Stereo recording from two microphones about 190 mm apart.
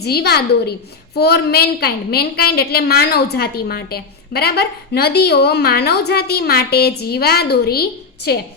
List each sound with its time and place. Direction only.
0.0 s a woman's voice: 55° left (ahead or behind)